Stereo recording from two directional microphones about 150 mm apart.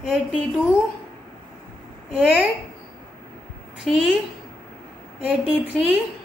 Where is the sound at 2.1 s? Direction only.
Centre (ahead or behind).